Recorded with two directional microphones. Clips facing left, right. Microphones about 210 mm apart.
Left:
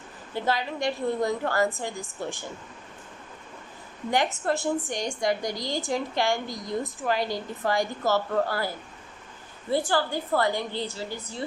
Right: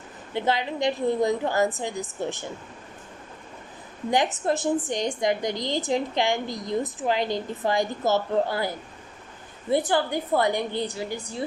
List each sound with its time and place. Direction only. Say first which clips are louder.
0.3 s a woman's voice: right 2 dB; 20° right (ahead or behind)
4.1 s a woman's voice: right 2 dB; 20° right (ahead or behind)